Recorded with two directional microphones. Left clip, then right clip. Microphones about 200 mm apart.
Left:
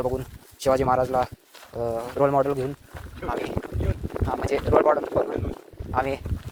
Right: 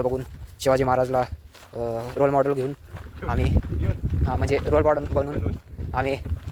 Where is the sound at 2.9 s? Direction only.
50° left (ahead or behind).